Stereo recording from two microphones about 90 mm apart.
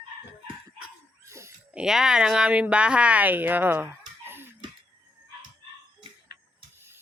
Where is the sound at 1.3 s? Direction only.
30° right (ahead or behind).